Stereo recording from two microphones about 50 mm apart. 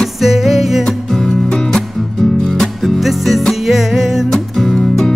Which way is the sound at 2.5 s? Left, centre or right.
Centre.